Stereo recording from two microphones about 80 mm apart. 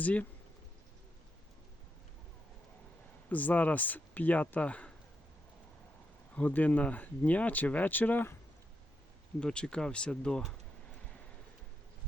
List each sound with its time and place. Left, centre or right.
0.0 s speech: centre
3.2 s speech: left
6.3 s speech: centre
9.4 s speech: centre